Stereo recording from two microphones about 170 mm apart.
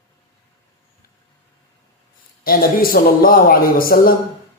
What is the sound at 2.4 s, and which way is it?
A man's voice, 60° left (ahead or behind).